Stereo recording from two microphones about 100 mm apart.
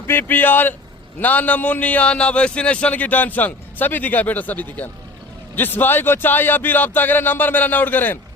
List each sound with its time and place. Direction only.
0.1 s a man's voice: 20° left (ahead or behind)